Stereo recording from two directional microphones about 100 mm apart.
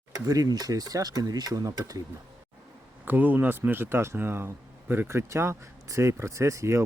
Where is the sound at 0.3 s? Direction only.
40° right (ahead or behind).